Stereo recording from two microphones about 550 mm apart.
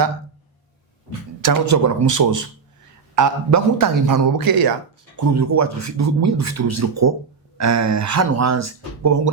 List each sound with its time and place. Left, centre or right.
1.4 s a man's voice: right